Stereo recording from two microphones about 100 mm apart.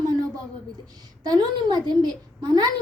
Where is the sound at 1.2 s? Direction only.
45° right (ahead or behind).